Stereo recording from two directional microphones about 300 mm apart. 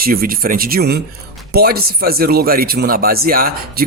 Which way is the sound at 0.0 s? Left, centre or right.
Right.